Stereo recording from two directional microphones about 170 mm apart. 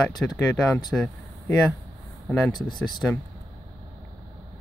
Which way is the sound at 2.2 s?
Centre (ahead or behind).